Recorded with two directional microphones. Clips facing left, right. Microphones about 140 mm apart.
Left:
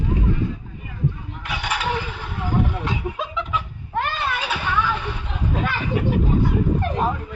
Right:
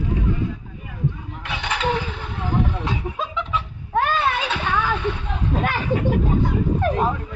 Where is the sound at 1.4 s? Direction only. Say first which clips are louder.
Even; 25° right (ahead or behind).